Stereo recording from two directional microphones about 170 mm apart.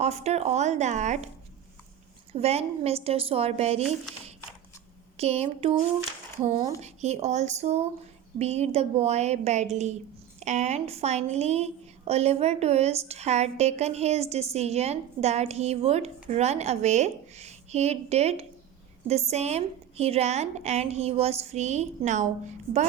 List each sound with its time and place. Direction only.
0.0 s a woman's voice: 40° right (ahead or behind)
2.3 s a woman's voice: 40° right (ahead or behind)
5.1 s a woman's voice: 35° right (ahead or behind)